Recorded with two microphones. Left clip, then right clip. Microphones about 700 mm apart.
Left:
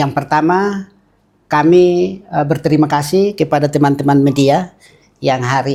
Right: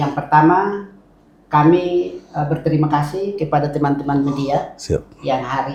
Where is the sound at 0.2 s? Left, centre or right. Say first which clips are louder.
Left 6 dB; left.